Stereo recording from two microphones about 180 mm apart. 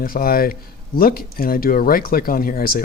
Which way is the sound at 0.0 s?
55° left (ahead or behind).